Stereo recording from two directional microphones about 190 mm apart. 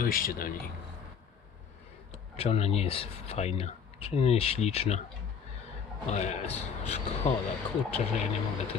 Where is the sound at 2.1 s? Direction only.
30° left (ahead or behind).